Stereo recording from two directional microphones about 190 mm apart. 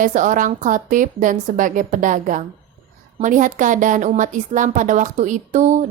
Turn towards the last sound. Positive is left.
turn(degrees=-40)  # may be behind; listen again after turning